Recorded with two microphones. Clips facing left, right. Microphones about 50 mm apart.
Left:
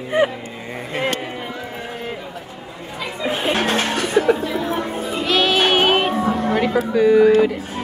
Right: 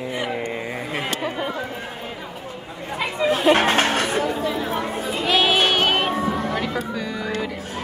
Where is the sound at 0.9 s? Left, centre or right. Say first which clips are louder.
Left 7 dB; centre.